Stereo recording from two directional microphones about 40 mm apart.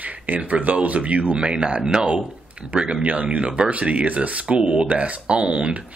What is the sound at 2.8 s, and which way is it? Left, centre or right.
Speech, right.